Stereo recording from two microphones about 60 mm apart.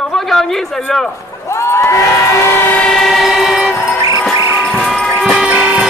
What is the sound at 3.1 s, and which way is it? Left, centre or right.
Train, centre.